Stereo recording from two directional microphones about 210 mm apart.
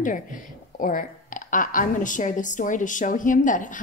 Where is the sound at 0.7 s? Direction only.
40° left (ahead or behind).